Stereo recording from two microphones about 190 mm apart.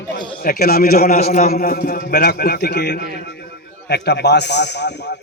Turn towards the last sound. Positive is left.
turn(degrees=65)  # may be behind; listen again after turning